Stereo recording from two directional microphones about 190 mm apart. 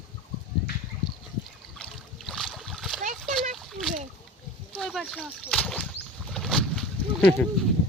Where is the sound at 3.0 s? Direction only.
40° right (ahead or behind).